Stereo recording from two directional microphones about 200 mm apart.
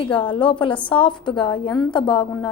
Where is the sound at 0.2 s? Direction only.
25° left (ahead or behind).